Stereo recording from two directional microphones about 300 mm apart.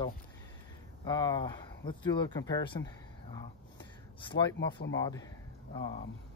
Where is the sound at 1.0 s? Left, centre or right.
Centre.